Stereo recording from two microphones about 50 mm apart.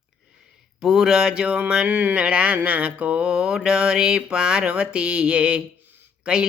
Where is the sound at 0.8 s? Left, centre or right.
Centre.